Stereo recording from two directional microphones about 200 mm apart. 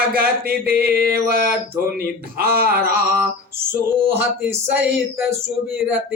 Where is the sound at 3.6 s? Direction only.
10° right (ahead or behind).